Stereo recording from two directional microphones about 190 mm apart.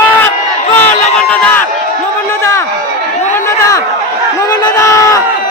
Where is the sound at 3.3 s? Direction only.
15° left (ahead or behind).